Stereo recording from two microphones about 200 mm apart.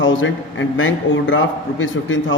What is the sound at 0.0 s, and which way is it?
A man's voice, 70° left (ahead or behind).